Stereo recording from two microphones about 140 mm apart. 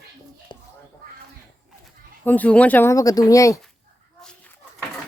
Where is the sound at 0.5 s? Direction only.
35° left (ahead or behind).